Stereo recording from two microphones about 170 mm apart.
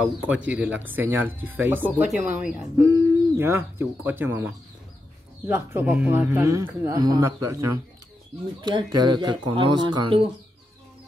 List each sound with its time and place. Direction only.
0.0 s speech: 10° right (ahead or behind)
2.9 s speech: 15° right (ahead or behind)